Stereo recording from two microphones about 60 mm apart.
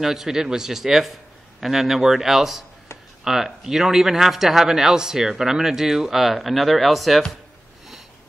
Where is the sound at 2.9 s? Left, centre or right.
Left.